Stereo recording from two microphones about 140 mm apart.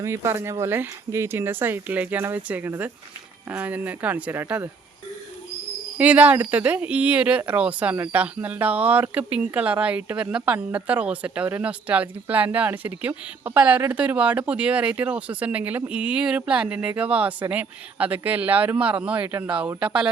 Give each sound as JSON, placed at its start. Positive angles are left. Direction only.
{"t": 0.0, "sound": "speech", "side_deg": -20}
{"t": 6.0, "sound": "speech", "side_deg": -10}